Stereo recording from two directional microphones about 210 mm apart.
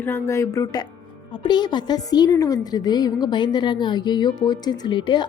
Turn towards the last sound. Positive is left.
turn(degrees=20)  # may be behind; listen again after turning